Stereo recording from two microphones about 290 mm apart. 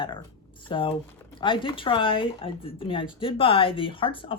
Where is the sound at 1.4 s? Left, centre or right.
Centre.